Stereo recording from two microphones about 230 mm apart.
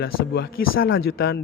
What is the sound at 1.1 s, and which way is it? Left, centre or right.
Speech, left.